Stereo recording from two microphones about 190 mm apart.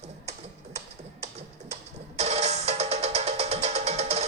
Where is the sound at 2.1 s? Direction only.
35° right (ahead or behind).